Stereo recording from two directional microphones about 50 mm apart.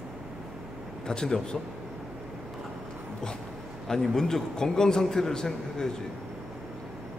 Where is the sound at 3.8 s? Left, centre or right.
Centre.